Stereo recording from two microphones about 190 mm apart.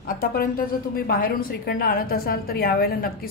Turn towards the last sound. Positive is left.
turn(degrees=50)  # may be behind; listen again after turning